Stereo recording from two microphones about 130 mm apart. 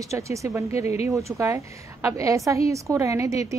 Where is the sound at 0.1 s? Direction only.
25° right (ahead or behind).